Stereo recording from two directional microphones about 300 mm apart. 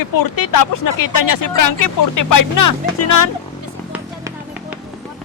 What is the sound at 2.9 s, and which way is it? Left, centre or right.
Speech, left.